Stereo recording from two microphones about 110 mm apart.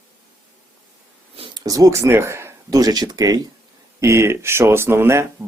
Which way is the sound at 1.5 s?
35° right (ahead or behind).